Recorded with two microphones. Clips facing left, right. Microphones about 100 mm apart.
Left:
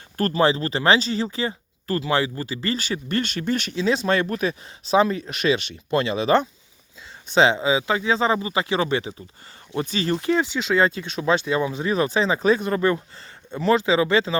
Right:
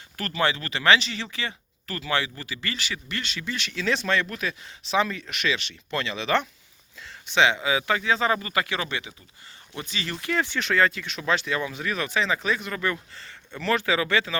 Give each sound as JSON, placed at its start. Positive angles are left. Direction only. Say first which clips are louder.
{"t": 0.2, "sound": "speech", "louder": "left 7 dB", "side_deg": 35}
{"t": 3.8, "sound": "speech", "louder": "left 3 dB", "side_deg": 30}
{"t": 10.5, "sound": "speech", "louder": "left 3 dB", "side_deg": 15}
{"t": 10.8, "sound": "speech", "louder": "left 4 dB", "side_deg": 30}